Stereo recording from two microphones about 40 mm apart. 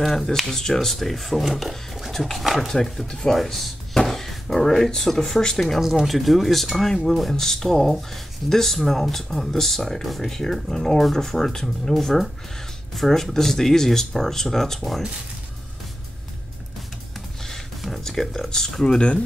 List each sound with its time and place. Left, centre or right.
0.0 s speech: centre
5.8 s speech: centre
17.5 s a sound: centre
18.9 s speech: left